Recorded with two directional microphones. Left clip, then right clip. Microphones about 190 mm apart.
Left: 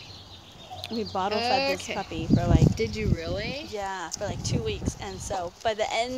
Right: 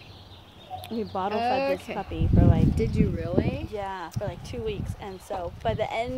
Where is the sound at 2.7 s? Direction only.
40° right (ahead or behind).